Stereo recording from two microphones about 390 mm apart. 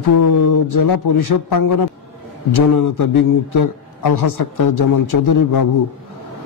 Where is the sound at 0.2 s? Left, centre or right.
Left.